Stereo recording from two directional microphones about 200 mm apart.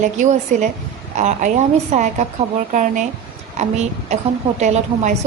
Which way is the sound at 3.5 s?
35° right (ahead or behind).